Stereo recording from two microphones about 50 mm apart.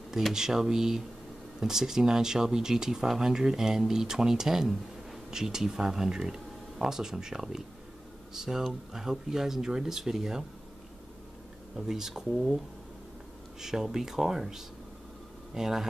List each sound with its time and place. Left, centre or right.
0.3 s speech: centre
11.7 s speech: centre
13.6 s speech: centre